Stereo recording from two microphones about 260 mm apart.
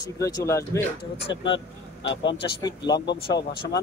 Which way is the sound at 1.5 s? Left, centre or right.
Left.